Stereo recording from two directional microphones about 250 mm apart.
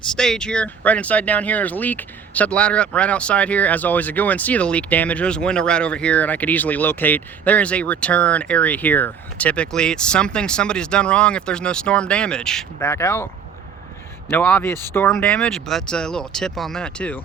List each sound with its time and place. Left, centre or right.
0.2 s speech: centre
14.3 s a man's voice: centre